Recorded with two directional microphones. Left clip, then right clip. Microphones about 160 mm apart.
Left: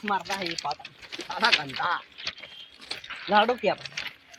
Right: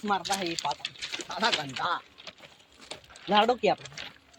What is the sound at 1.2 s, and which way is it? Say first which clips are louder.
Speech: left 5 dB; 45° right (ahead or behind).